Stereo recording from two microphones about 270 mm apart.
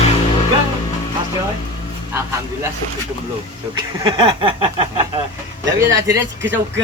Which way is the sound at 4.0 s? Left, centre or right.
Centre.